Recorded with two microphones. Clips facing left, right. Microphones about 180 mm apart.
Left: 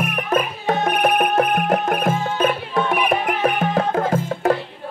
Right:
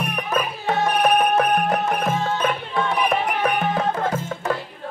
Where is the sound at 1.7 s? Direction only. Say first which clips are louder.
Left 2 dB; 55° left (ahead or behind).